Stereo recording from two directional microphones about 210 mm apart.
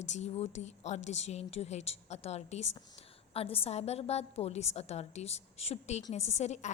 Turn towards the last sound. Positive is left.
turn(degrees=35)  # may be behind; listen again after turning